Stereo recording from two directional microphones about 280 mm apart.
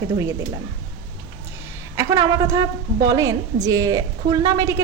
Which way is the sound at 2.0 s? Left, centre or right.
Centre.